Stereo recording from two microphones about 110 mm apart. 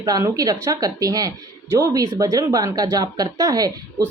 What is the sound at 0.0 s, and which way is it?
Speech, 30° right (ahead or behind).